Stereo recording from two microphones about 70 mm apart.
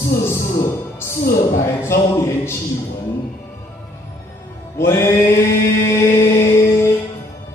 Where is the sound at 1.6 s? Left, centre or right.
Left.